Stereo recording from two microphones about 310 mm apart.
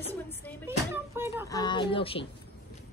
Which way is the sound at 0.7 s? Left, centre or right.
Centre.